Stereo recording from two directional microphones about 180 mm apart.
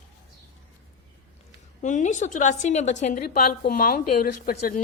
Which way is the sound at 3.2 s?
55° left (ahead or behind).